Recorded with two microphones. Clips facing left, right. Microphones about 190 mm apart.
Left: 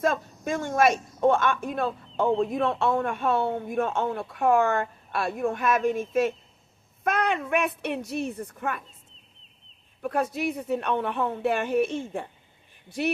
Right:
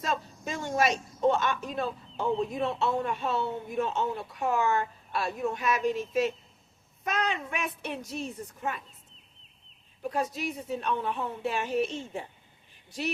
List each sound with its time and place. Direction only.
0.0 s a woman's voice: 55° left (ahead or behind)
10.0 s a woman's voice: 60° left (ahead or behind)